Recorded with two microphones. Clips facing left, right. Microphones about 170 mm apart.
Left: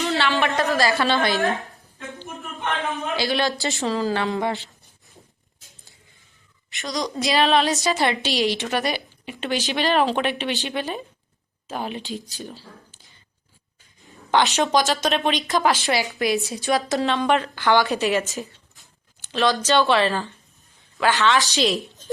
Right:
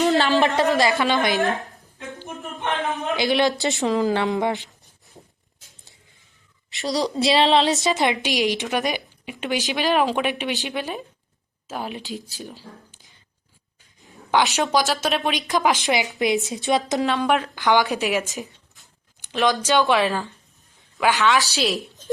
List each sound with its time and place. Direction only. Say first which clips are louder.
0.0 s a sound: right 4 dB; 40° right (ahead or behind)
0.7 s a woman's voice: right 1 dB; 20° right (ahead or behind)
6.8 s a woman's voice: right 4 dB; 35° right (ahead or behind)
7.1 s a woman's voice: right 1 dB; 25° right (ahead or behind)
14.0 s speech: even; 5° right (ahead or behind)
15.3 s a woman's voice: even; 10° right (ahead or behind)
17.1 s speech: left 1 dB; 5° right (ahead or behind)